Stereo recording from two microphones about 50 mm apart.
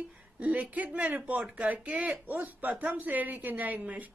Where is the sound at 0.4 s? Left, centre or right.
Right.